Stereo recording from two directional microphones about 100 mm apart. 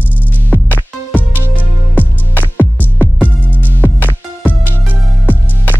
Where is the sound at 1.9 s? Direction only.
15° left (ahead or behind).